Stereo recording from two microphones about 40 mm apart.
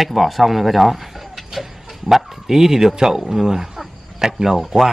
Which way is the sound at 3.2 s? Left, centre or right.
Centre.